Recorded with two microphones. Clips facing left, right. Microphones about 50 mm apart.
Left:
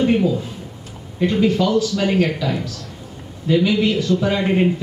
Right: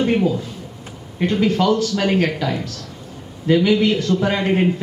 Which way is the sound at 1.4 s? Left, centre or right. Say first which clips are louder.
Even; right.